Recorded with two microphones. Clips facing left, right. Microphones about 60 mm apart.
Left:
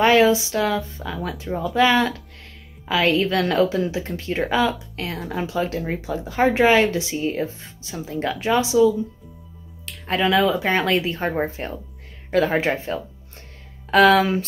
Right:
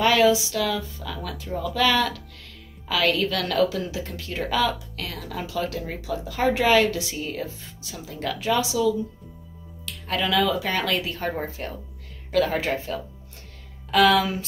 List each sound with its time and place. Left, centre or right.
0.0 s speech: left